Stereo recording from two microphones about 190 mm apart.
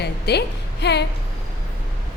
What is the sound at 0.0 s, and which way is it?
A woman's voice, 60° left (ahead or behind).